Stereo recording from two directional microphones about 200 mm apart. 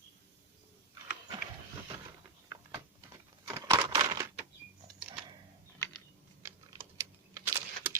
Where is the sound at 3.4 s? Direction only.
15° right (ahead or behind).